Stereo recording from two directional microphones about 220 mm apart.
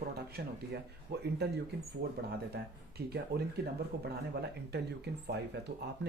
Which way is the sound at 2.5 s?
45° right (ahead or behind).